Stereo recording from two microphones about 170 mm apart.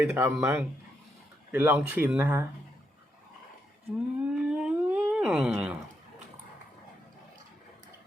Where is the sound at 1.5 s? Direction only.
10° right (ahead or behind).